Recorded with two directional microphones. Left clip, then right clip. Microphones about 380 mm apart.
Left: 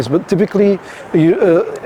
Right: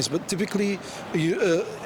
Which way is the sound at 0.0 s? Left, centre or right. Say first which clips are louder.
Left 12 dB; left.